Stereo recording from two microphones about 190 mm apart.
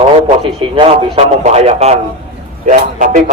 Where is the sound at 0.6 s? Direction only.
30° right (ahead or behind).